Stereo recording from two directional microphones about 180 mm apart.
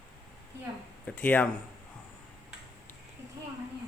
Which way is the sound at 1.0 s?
10° left (ahead or behind).